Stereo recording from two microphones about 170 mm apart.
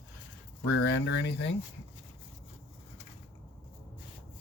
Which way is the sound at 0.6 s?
85° left.